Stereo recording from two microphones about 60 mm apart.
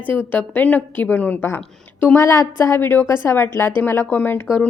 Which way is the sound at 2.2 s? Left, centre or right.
Left.